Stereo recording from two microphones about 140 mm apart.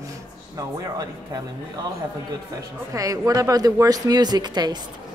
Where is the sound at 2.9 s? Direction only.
25° right (ahead or behind).